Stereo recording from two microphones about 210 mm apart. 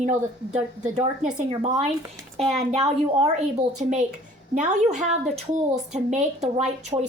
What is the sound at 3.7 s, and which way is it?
Speech, 35° right (ahead or behind).